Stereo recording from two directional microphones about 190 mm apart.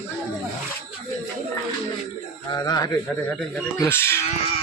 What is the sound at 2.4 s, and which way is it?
A man's voice, 20° left (ahead or behind).